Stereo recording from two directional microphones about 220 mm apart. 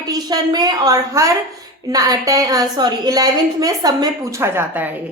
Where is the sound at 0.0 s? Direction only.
20° right (ahead or behind).